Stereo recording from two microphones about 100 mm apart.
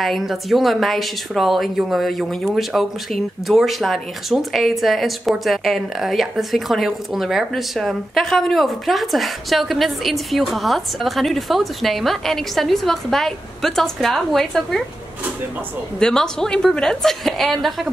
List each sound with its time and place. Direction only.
0.0 s a woman's voice: centre (ahead or behind)
16.0 s a woman's voice: 5° left (ahead or behind)